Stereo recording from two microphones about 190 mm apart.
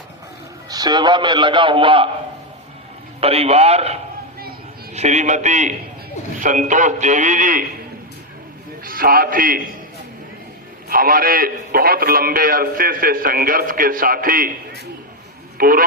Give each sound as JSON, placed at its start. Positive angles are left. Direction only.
{"t": 0.7, "sound": "a man's voice", "side_deg": -20}
{"t": 3.2, "sound": "a man's voice", "side_deg": -30}
{"t": 4.9, "sound": "a man's voice", "side_deg": -35}
{"t": 8.8, "sound": "a man's voice", "side_deg": -50}
{"t": 10.8, "sound": "a man's voice", "side_deg": -50}
{"t": 15.5, "sound": "speech", "side_deg": -50}